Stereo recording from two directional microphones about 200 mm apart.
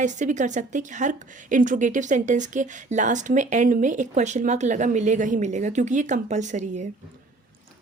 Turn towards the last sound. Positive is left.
turn(degrees=-35)  # may be behind; listen again after turning